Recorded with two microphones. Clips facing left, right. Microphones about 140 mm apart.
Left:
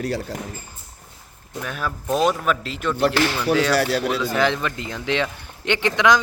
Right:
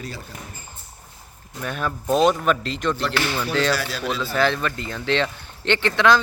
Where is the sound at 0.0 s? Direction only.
75° left (ahead or behind).